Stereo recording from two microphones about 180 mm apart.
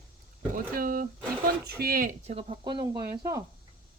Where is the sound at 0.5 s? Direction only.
50° right (ahead or behind).